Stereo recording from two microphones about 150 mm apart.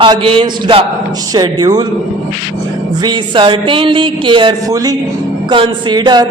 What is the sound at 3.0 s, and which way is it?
Speech, 30° right (ahead or behind).